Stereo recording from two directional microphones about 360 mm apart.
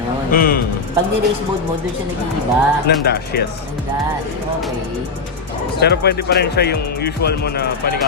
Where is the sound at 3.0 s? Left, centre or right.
Left.